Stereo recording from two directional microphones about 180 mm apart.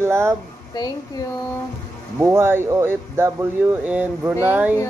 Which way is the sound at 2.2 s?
15° right (ahead or behind).